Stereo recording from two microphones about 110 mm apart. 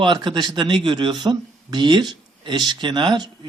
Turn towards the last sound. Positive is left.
turn(degrees=-45)  # may be behind; listen again after turning